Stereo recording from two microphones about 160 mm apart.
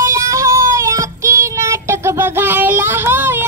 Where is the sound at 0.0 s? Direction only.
20° right (ahead or behind).